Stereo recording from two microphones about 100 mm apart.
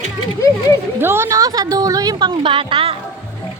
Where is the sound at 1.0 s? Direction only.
25° right (ahead or behind); by 2.4 s 40° right (ahead or behind).